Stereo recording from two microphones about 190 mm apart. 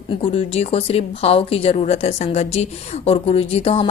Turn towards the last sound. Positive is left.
turn(degrees=30)  # may be behind; listen again after turning